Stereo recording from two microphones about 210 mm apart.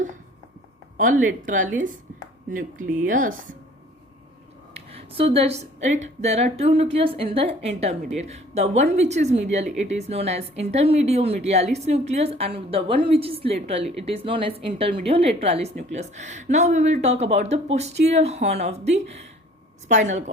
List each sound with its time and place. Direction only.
0.9 s speech: 40° right (ahead or behind)
4.7 s speech: 30° right (ahead or behind)